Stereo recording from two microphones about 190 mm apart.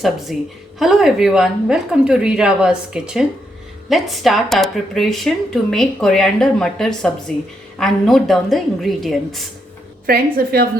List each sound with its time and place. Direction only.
0.3 s speech: centre (ahead or behind)
10.1 s a woman's voice: 55° right (ahead or behind)